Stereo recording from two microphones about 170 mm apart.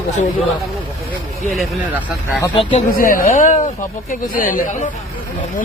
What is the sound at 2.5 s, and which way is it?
Speech, 30° left (ahead or behind).